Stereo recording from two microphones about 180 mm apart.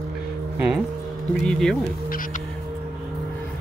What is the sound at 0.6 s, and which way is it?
Speech, 5° right (ahead or behind).